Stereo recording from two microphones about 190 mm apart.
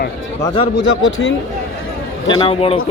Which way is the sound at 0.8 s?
85° left.